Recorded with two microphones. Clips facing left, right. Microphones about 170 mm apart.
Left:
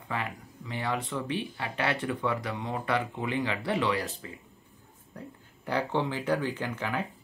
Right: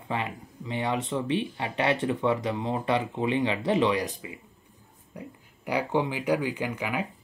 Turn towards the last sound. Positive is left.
turn(degrees=-10)  # may be behind; listen again after turning